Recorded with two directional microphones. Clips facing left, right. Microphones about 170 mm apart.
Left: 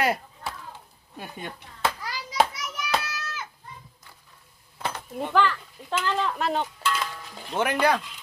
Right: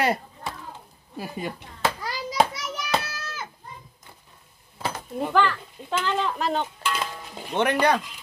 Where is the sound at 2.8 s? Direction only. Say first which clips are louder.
Right 1 dB; 35° right (ahead or behind).